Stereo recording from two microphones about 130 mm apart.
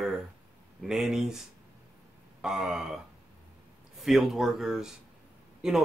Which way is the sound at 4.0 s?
Centre (ahead or behind).